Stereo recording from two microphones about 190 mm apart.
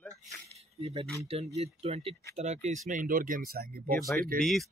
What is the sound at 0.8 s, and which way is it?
Speech, 30° right (ahead or behind).